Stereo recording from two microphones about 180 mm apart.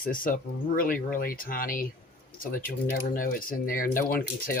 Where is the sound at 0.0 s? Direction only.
50° left (ahead or behind).